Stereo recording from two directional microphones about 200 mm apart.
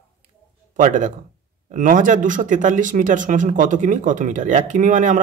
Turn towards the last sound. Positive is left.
turn(degrees=-40)  # may be behind; listen again after turning